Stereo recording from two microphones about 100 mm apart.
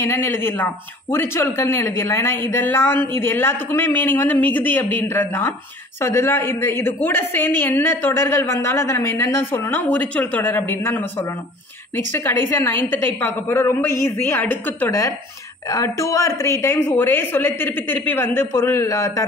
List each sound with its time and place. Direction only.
0.0 s a woman's voice: 25° left (ahead or behind)
12.1 s a woman's voice: 20° left (ahead or behind)
14.9 s a woman's voice: 30° left (ahead or behind)